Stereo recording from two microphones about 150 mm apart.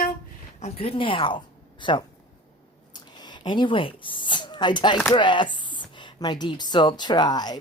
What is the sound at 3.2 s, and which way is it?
Speech, 30° left (ahead or behind).